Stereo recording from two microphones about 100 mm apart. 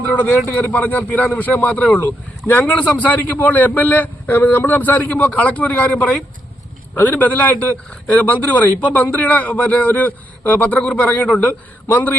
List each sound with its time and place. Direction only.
0.0 s a man's voice: 15° left (ahead or behind)